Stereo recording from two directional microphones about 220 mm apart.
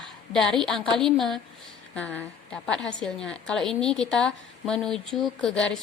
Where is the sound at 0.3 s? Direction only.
Centre (ahead or behind).